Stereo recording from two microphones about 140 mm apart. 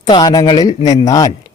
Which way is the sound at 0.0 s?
30° left (ahead or behind).